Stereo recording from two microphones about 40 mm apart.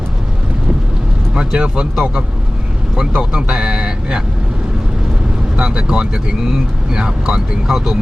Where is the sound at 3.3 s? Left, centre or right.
Centre.